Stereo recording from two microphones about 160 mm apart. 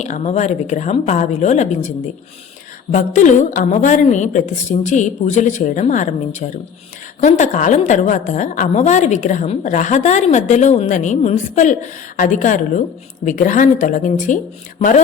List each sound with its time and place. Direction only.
0.0 s a woman's voice: 45° left (ahead or behind)
2.9 s a woman's voice: 50° left (ahead or behind)
7.2 s a woman's voice: 50° left (ahead or behind)